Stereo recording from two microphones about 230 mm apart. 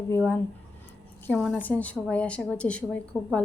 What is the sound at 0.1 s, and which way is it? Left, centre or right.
A woman's voice, centre.